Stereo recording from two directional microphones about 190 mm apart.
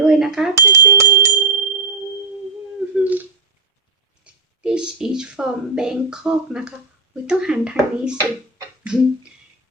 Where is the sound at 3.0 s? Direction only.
10° right (ahead or behind).